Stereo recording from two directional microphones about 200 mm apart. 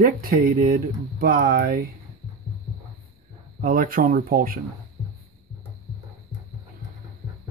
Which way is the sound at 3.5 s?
45° right (ahead or behind).